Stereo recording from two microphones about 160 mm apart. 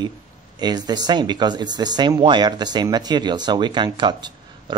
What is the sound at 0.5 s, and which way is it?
Speech, 25° right (ahead or behind).